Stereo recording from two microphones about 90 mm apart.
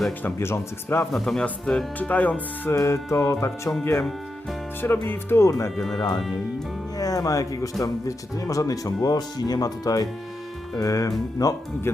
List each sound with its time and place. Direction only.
0.2 s speech: 25° left (ahead or behind)
1.1 s a man's voice: 5° left (ahead or behind)
2.7 s speech: 35° left (ahead or behind)
4.8 s speech: 25° left (ahead or behind)
5.7 s a man's voice: 5° left (ahead or behind)
6.0 s speech: 55° left (ahead or behind)
6.9 s speech: 40° left (ahead or behind)